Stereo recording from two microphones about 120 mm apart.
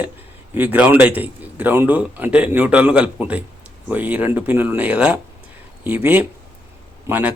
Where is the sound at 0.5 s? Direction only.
15° right (ahead or behind).